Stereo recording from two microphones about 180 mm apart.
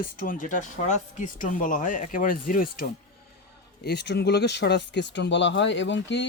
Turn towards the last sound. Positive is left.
turn(degrees=80)